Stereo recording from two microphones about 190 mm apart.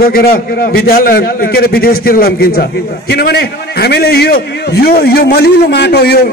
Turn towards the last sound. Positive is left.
turn(degrees=55)  # may be behind; listen again after turning